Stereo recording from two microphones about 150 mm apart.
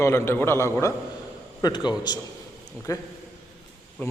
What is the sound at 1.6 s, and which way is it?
A man's voice, 30° left (ahead or behind).